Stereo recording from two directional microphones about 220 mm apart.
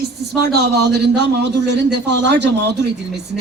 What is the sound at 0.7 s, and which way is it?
Speech, 50° right (ahead or behind).